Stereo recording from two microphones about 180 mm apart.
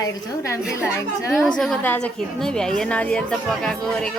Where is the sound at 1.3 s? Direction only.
5° left (ahead or behind).